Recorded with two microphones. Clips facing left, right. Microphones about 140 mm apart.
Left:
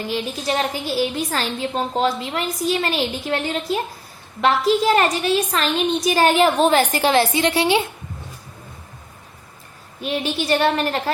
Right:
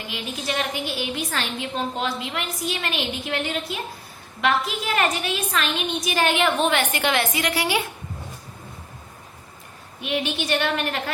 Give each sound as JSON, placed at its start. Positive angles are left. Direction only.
{"t": 0.1, "sound": "a woman's voice", "side_deg": 35}
{"t": 10.0, "sound": "a woman's voice", "side_deg": 35}